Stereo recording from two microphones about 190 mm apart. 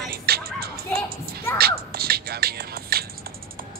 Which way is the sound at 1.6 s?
55° right (ahead or behind).